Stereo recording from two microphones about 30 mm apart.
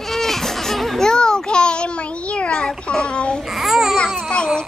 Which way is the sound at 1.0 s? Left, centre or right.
Left.